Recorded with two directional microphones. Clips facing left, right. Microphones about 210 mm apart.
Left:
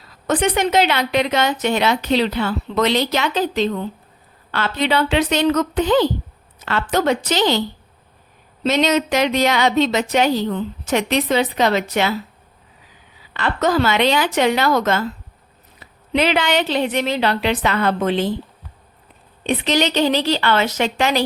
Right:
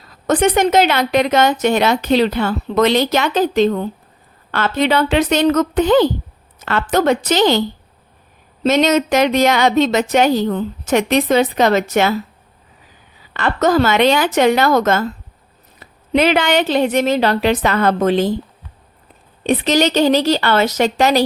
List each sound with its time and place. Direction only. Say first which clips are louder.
0.3 s a woman's voice: right 4 dB; 45° right (ahead or behind)
8.6 s a woman's voice: right 3 dB; 50° right (ahead or behind)
13.3 s a woman's voice: right 4 dB; 45° right (ahead or behind)
19.5 s a woman's voice: right 4 dB; 45° right (ahead or behind)